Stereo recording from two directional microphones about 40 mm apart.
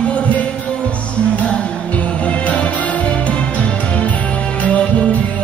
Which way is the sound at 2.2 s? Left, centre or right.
Left.